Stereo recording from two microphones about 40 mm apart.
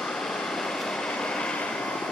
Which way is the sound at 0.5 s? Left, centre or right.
Centre.